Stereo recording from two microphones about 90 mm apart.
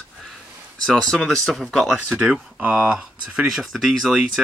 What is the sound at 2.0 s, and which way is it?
Speech, 15° right (ahead or behind).